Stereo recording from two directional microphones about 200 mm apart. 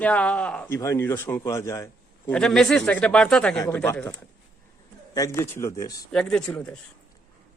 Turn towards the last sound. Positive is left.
turn(degrees=5)  # may be behind; listen again after turning